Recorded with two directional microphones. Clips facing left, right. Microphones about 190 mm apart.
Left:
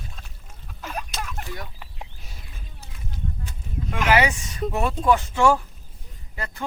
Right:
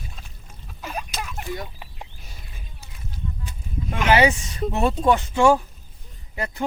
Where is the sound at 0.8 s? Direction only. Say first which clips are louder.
Right 1 dB; 5° right (ahead or behind).